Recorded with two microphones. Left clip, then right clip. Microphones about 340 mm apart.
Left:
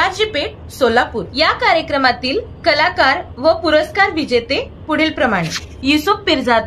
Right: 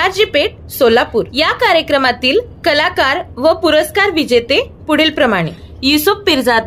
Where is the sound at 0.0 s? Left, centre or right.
Right.